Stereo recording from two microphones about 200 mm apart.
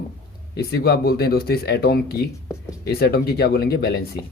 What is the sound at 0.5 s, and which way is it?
A man's voice, 50° left (ahead or behind).